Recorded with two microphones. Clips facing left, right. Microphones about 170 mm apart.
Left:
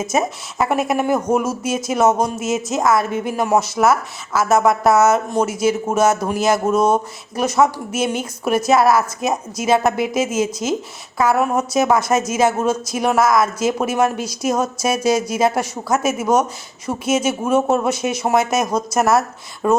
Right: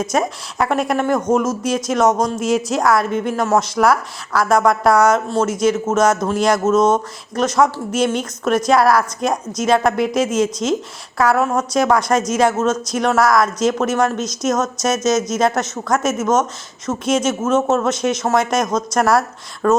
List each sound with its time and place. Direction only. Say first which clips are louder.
0.0 s a woman's voice: right 1 dB; 5° left (ahead or behind)